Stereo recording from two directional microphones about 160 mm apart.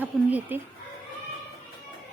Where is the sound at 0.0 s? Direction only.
10° right (ahead or behind).